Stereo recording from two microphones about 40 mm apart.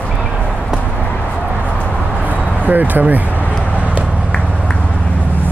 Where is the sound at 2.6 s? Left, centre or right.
Right.